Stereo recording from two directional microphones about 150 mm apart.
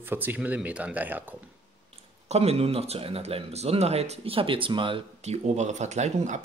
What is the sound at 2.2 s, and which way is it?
Speech, 45° right (ahead or behind).